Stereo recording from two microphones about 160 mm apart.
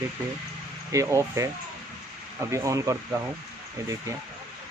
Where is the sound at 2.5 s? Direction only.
20° right (ahead or behind).